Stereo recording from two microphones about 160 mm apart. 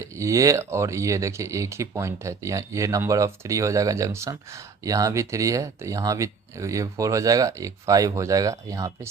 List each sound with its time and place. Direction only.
0.0 s speech: 20° right (ahead or behind)